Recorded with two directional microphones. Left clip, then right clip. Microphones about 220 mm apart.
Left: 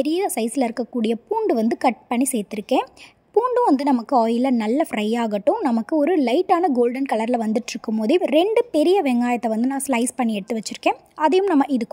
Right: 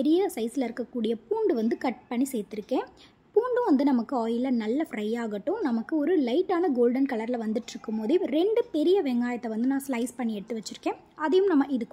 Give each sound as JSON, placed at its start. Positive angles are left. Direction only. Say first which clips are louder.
{"t": 0.0, "sound": "a woman's voice", "louder": "left 4 dB", "side_deg": 35}